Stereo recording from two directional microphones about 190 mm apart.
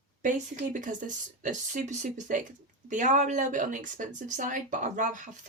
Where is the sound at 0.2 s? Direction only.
40° right (ahead or behind).